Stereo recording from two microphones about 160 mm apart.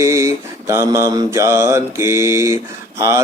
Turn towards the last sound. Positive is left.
turn(degrees=-15)  # may be behind; listen again after turning